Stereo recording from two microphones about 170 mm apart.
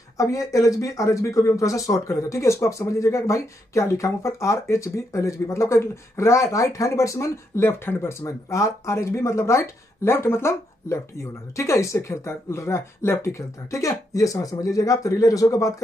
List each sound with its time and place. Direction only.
0.2 s speech: 20° left (ahead or behind)